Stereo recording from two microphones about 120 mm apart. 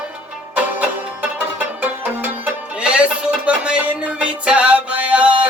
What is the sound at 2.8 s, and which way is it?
Music, 10° right (ahead or behind).